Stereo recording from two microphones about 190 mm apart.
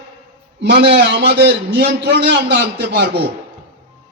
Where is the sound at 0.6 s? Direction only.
65° right (ahead or behind).